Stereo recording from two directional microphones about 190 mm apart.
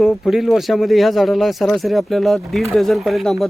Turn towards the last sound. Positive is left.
turn(degrees=0)  # may be behind; listen again after turning